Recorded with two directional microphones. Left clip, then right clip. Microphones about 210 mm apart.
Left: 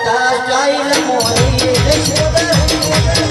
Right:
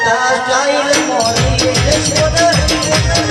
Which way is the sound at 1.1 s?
15° left (ahead or behind).